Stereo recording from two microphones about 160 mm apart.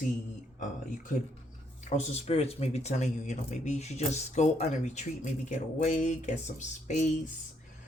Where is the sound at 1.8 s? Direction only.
40° left (ahead or behind).